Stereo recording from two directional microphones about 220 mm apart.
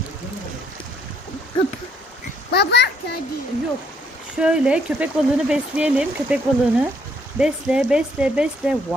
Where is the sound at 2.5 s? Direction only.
50° left (ahead or behind).